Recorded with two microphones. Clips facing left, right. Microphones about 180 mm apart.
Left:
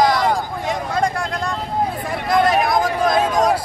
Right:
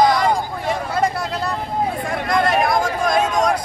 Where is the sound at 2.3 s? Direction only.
Centre (ahead or behind).